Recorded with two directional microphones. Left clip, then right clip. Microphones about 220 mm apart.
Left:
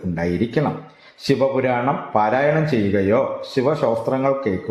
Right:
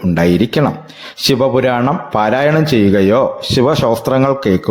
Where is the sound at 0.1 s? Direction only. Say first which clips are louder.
Right 8 dB; 35° right (ahead or behind).